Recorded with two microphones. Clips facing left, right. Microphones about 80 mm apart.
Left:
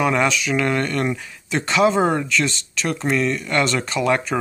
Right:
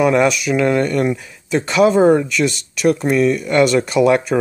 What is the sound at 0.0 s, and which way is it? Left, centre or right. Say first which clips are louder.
Speech: right 5 dB; centre.